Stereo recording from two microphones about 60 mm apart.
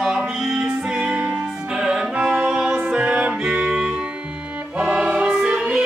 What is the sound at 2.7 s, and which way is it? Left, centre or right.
Music, right.